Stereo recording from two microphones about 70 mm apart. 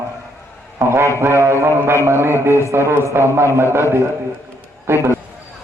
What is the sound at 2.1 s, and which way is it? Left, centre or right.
A man's voice, right.